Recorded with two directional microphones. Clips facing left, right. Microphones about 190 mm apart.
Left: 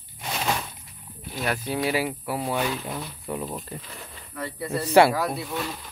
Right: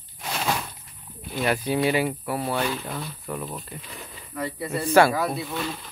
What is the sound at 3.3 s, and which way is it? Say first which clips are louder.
Speech: left 2 dB; 25° left (ahead or behind).